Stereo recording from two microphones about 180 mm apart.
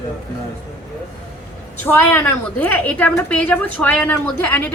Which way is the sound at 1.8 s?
10° left (ahead or behind).